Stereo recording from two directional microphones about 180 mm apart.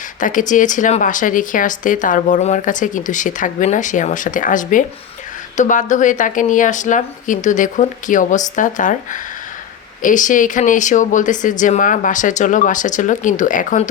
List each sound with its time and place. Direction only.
0.2 s speech: 45° left (ahead or behind)
10.0 s speech: 45° left (ahead or behind)